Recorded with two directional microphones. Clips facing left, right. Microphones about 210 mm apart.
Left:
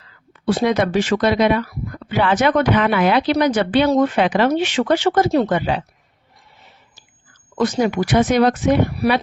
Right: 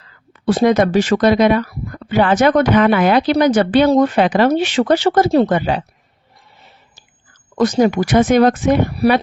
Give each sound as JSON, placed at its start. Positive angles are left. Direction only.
{"t": 0.4, "sound": "speech", "side_deg": -45}
{"t": 7.5, "sound": "speech", "side_deg": -45}